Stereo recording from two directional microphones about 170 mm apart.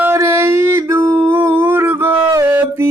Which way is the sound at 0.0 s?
15° right (ahead or behind).